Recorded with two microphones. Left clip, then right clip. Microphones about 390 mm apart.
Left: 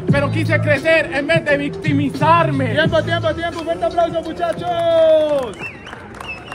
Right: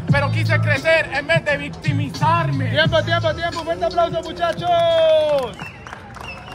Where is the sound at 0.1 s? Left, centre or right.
Centre.